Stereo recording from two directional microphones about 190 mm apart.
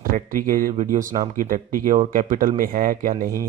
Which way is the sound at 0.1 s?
45° right (ahead or behind).